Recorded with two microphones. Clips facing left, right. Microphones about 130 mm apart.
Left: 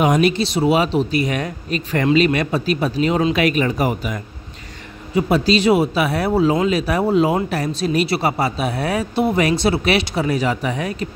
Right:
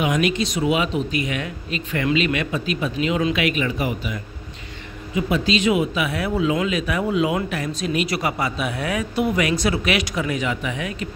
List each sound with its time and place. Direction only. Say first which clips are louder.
0.0 s a man's voice: left 5 dB; 35° left (ahead or behind)